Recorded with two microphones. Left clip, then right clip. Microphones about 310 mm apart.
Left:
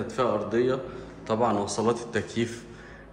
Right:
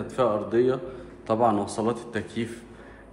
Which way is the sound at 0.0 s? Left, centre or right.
Centre.